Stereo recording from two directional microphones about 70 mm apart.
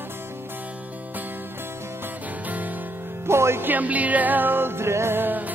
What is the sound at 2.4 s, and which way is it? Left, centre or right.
Music, right.